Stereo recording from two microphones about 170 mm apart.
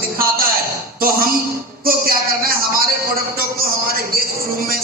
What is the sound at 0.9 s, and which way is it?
Speech, 60° right (ahead or behind).